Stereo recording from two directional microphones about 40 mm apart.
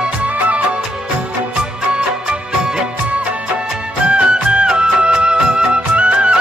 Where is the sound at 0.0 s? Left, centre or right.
Right; by 2.8 s centre.